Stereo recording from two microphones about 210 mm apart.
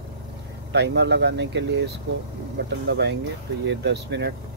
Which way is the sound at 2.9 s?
55° right (ahead or behind).